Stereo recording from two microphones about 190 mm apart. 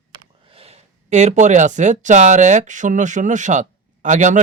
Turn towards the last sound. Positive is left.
turn(degrees=-40)  # may be behind; listen again after turning